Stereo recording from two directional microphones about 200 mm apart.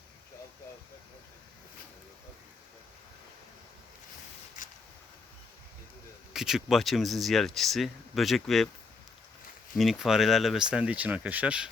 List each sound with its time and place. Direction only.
4.6 s vehicle: 40° left (ahead or behind)
6.3 s speech: centre (ahead or behind)
9.7 s speech: centre (ahead or behind)